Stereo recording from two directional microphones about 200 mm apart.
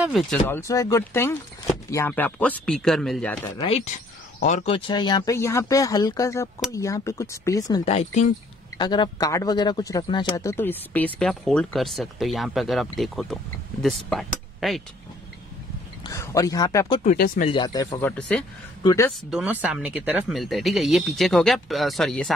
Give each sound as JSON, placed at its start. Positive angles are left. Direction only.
{"t": 0.0, "sound": "a man's voice", "side_deg": 0}
{"t": 0.5, "sound": "speech", "side_deg": 15}
{"t": 3.4, "sound": "speech", "side_deg": 20}
{"t": 4.4, "sound": "speech", "side_deg": 40}
{"t": 7.8, "sound": "speech", "side_deg": 30}
{"t": 8.7, "sound": "a man's voice", "side_deg": 20}
{"t": 16.0, "sound": "speech", "side_deg": 15}
{"t": 17.0, "sound": "speech", "side_deg": 40}
{"t": 17.5, "sound": "speech", "side_deg": 20}
{"t": 18.3, "sound": "a man's voice", "side_deg": 5}
{"t": 18.8, "sound": "speech", "side_deg": 20}
{"t": 19.3, "sound": "a man's voice", "side_deg": -5}